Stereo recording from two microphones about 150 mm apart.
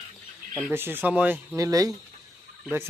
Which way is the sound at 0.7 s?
15° right (ahead or behind).